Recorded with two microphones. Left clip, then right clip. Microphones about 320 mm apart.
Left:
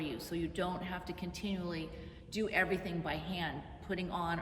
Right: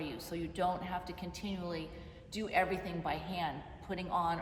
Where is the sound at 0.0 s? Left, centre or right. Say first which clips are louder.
Left 2 dB; centre.